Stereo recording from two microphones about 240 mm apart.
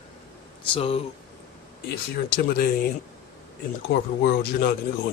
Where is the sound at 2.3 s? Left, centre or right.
Left.